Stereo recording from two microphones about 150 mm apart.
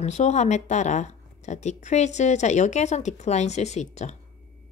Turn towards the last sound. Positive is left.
turn(degrees=50)  # may be behind; listen again after turning